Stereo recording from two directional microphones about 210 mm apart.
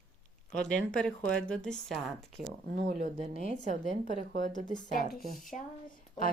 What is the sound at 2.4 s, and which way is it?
A woman's voice, 35° right (ahead or behind).